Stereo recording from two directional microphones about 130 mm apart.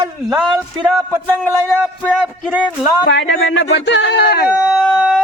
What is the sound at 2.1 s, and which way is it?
Speech, 5° right (ahead or behind).